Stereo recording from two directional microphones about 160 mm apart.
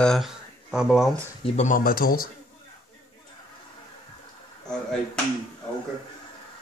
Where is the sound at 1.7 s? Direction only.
65° left (ahead or behind).